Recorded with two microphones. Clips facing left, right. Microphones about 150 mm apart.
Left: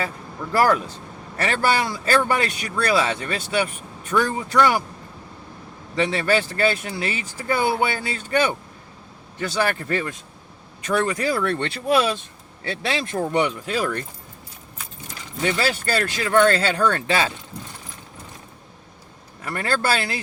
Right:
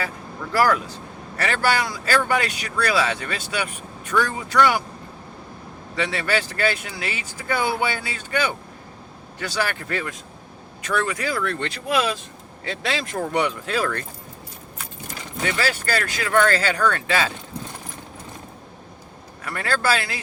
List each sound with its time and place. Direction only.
0.5 s speech: 25° left (ahead or behind)
6.0 s speech: 30° left (ahead or behind)
13.7 s speech: 15° left (ahead or behind)
15.4 s speech: 25° left (ahead or behind)
19.5 s speech: 30° left (ahead or behind)